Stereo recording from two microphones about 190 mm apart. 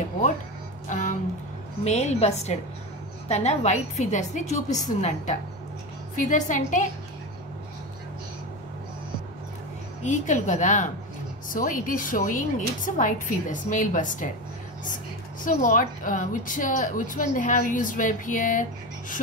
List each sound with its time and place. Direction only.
0.8 s music: 40° left (ahead or behind)
1.9 s a woman's voice: 35° left (ahead or behind)
10.0 s a woman's voice: 40° left (ahead or behind)
15.4 s a woman's voice: 45° left (ahead or behind)